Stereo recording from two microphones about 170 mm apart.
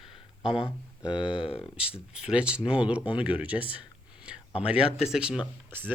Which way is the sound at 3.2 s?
10° right (ahead or behind).